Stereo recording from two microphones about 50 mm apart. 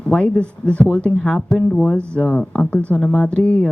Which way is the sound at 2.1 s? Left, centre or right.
Left.